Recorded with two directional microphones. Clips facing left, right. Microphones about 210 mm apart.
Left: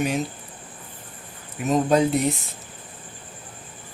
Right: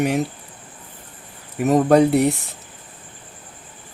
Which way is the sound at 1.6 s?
65° right (ahead or behind).